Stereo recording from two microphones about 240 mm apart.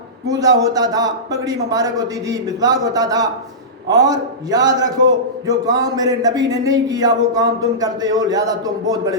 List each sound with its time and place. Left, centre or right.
0.3 s speech: centre